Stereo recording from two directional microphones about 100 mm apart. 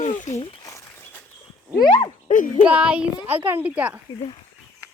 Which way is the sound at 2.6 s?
10° right (ahead or behind).